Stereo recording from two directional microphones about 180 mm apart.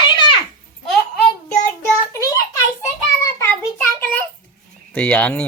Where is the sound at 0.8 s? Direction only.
Centre (ahead or behind).